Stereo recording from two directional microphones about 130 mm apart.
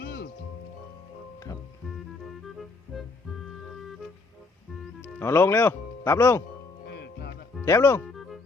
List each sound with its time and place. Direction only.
2.9 s music: centre (ahead or behind)
5.0 s speech: 20° left (ahead or behind)
7.6 s speech: 25° left (ahead or behind)
8.0 s music: centre (ahead or behind)